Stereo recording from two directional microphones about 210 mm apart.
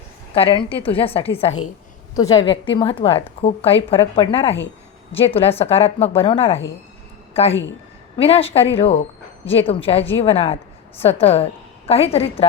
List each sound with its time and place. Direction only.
0.3 s a woman's voice: 25° left (ahead or behind)